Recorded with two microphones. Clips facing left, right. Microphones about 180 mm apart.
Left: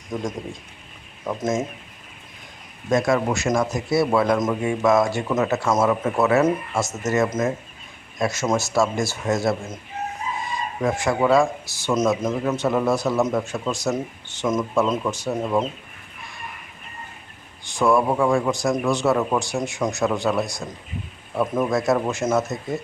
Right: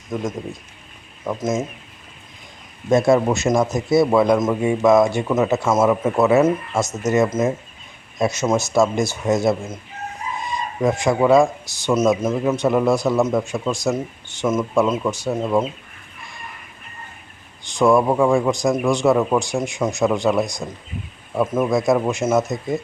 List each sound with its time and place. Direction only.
0.1 s speech: 5° right (ahead or behind)
2.9 s a man's voice: 25° right (ahead or behind)
10.8 s speech: 15° right (ahead or behind)
17.7 s speech: 15° right (ahead or behind)
21.3 s speech: 5° right (ahead or behind)